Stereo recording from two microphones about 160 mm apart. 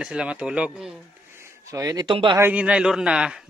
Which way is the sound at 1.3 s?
15° right (ahead or behind).